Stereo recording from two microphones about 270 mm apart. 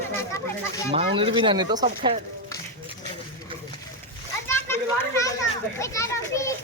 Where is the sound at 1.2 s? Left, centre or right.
Centre.